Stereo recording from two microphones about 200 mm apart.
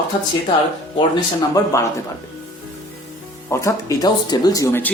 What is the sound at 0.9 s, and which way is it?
Speech, 20° left (ahead or behind).